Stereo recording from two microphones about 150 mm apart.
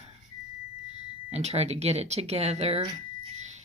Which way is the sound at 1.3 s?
45° right (ahead or behind).